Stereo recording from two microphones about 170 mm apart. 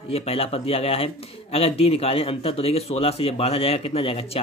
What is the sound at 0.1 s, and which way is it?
Speech, 35° left (ahead or behind).